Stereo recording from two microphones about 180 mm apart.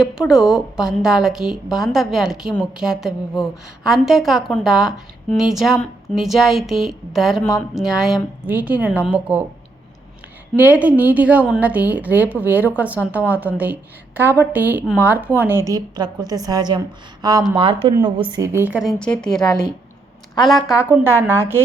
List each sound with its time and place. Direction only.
0.0 s a woman's voice: 5° right (ahead or behind)
10.5 s a woman's voice: 10° right (ahead or behind)
20.7 s a woman's voice: 10° right (ahead or behind)